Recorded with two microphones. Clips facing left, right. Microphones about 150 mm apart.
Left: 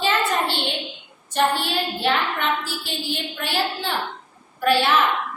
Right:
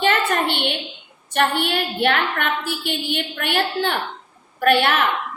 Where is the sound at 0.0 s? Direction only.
60° right (ahead or behind).